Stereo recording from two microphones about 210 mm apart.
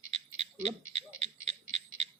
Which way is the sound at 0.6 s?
30° right (ahead or behind).